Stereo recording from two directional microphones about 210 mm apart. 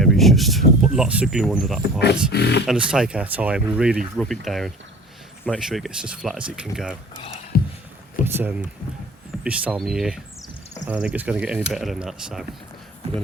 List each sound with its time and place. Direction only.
0.0 s speech: centre (ahead or behind)
2.3 s speech: 55° left (ahead or behind)
2.6 s speech: 5° right (ahead or behind)
7.5 s a sound: 45° left (ahead or behind)
8.2 s speech: 10° right (ahead or behind)